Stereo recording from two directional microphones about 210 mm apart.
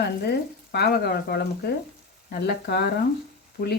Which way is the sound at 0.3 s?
50° left (ahead or behind).